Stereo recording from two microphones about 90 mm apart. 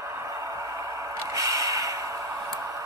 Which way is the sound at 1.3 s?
40° right (ahead or behind).